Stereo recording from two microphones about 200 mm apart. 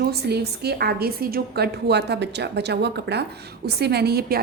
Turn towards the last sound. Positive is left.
turn(degrees=-50)  # may be behind; listen again after turning